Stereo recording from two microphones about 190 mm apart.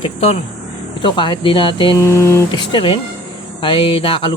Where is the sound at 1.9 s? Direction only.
15° left (ahead or behind).